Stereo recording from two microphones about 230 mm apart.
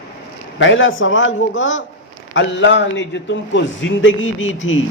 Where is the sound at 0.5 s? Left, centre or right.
Left.